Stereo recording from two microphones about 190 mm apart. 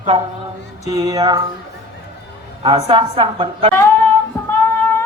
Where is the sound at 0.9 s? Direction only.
20° right (ahead or behind).